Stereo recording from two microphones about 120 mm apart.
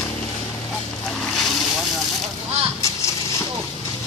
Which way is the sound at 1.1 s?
5° left (ahead or behind).